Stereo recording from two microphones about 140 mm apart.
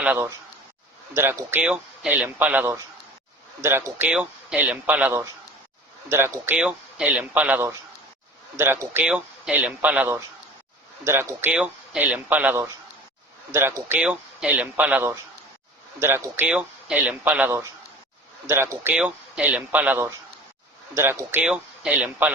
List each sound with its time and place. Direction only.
0.0 s speech: 10° right (ahead or behind)